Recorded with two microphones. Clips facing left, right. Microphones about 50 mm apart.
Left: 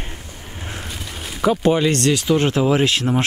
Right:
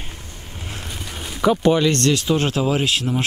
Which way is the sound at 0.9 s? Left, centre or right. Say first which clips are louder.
Even; centre.